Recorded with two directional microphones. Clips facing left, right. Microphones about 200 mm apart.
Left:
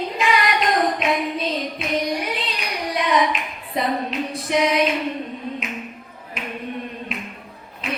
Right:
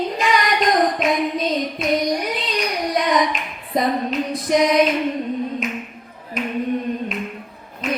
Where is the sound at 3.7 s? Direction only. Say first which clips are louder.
Right 3 dB; 40° right (ahead or behind).